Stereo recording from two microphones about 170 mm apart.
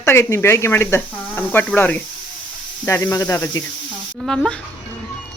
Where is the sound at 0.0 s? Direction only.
15° left (ahead or behind).